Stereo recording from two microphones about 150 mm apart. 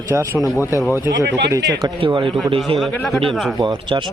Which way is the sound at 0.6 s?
20° left (ahead or behind).